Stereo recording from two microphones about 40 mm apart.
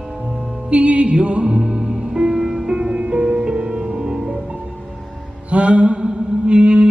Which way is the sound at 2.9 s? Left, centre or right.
Right.